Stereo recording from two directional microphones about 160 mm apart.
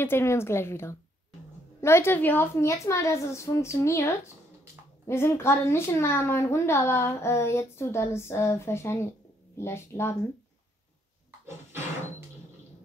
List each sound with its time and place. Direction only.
0.0 s a child's voice: 15° left (ahead or behind)
11.4 s dog: 15° right (ahead or behind)